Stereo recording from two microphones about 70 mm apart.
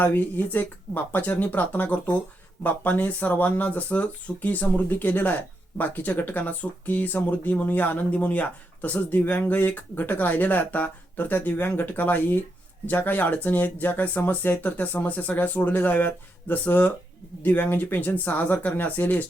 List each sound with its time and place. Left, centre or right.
0.0 s speech: left